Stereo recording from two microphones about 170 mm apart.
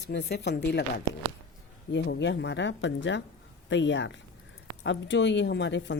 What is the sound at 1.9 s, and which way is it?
A woman's voice, 90° left.